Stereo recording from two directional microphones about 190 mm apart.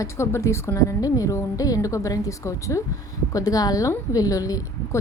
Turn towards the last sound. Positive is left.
turn(degrees=20)  # may be behind; listen again after turning